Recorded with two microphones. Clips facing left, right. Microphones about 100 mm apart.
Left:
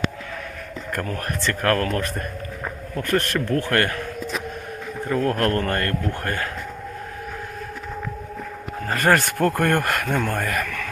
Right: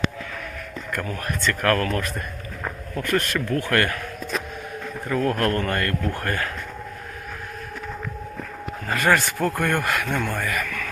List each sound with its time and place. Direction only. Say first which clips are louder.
0.9 s speech: left 1 dB; 40° left (ahead or behind)
1.6 s speech: left 1 dB; 30° left (ahead or behind)
3.7 s speech: right 2 dB; 30° left (ahead or behind)
5.1 s speech: left 1 dB; 30° left (ahead or behind)
8.9 s speech: left 1 dB; 40° left (ahead or behind)